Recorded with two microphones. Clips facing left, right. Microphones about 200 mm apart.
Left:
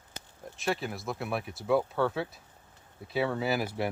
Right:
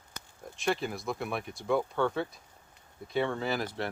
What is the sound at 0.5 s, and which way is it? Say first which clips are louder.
Speech: right 1 dB; centre (ahead or behind).